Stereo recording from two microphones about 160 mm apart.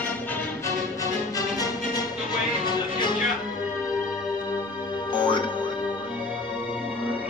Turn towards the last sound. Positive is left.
turn(degrees=30)  # may be behind; listen again after turning